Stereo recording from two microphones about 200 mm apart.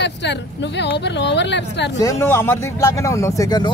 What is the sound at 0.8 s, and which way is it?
Speech, 60° left (ahead or behind).